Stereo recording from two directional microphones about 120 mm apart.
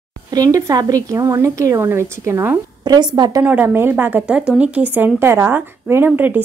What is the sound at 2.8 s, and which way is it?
Speech, 35° right (ahead or behind).